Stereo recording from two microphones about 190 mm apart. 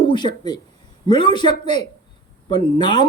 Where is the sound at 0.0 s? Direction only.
25° left (ahead or behind).